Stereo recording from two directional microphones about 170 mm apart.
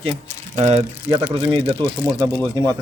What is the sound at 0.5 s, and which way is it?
Speech, 35° right (ahead or behind).